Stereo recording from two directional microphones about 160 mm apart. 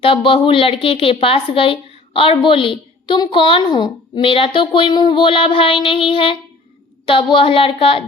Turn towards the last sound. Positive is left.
turn(degrees=35)  # may be behind; listen again after turning